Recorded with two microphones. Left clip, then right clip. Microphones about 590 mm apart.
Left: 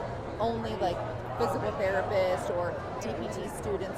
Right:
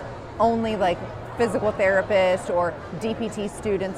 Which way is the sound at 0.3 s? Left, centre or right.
Right.